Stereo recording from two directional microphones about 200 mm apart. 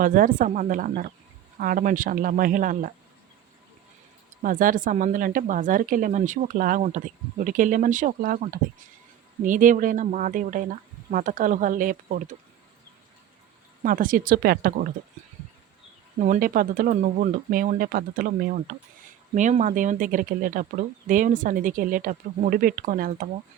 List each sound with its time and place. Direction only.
0.0 s speech: 45° right (ahead or behind)
4.4 s speech: 45° right (ahead or behind)
13.8 s speech: 45° right (ahead or behind)
16.1 s speech: 40° right (ahead or behind)